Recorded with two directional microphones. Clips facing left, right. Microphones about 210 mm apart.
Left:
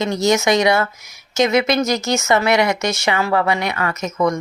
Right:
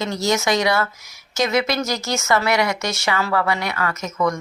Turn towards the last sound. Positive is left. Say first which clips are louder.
# left 3 dB
turn(degrees=20)  # may be behind; listen again after turning